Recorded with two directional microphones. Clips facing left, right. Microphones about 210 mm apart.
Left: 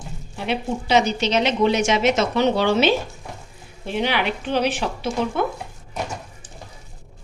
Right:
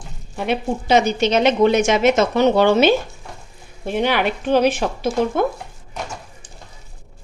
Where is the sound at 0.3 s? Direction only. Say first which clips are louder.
Right 3 dB; 50° right (ahead or behind).